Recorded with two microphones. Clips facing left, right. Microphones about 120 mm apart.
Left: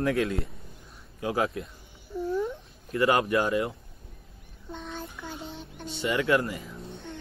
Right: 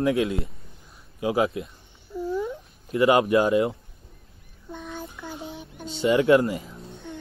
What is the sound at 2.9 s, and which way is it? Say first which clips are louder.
Speech: right 5 dB; 20° right (ahead or behind).